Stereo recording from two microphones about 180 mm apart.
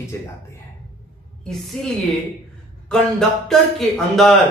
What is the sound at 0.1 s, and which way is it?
Speech, 15° left (ahead or behind).